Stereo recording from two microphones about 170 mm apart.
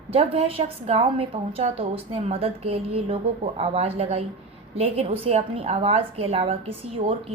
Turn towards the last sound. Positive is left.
turn(degrees=-35)  # may be behind; listen again after turning